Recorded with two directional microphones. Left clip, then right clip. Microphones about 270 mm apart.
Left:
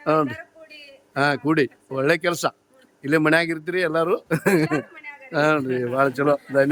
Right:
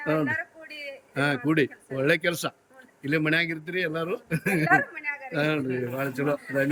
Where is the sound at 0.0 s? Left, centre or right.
Centre.